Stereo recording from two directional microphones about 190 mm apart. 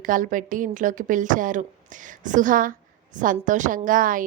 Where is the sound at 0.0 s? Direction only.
45° right (ahead or behind).